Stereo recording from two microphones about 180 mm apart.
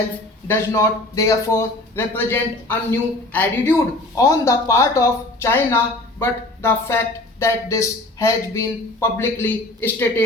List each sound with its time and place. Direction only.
0.4 s speech: 15° left (ahead or behind)